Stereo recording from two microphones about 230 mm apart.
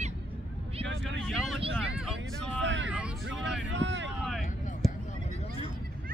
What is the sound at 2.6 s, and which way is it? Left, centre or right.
Vehicle, right.